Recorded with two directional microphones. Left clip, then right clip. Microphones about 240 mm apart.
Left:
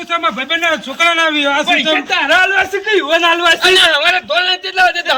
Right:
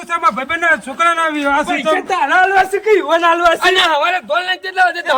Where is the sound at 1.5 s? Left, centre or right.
Right.